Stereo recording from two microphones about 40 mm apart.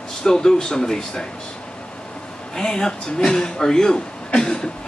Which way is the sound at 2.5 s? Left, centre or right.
Centre.